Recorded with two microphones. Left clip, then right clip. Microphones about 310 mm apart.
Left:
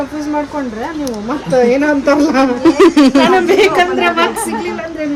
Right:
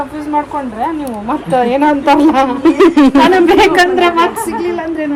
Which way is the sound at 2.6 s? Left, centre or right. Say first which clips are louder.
Left 1 dB; centre.